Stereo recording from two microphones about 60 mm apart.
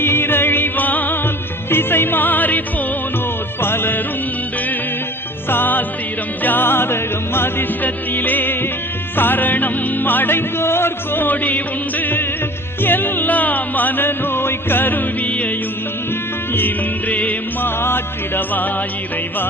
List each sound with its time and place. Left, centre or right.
0.0 s music: left
3.6 s music: left
5.5 s music: left
16.6 s music: left
17.7 s music: left